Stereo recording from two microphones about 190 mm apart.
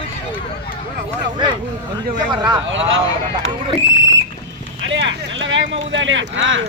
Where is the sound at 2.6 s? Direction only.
80° right.